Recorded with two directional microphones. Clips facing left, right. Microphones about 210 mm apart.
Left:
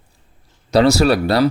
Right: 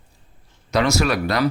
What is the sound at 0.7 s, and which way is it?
Speech, 35° left (ahead or behind).